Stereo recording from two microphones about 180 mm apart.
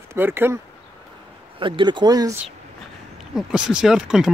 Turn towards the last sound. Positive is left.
turn(degrees=-5)  # may be behind; listen again after turning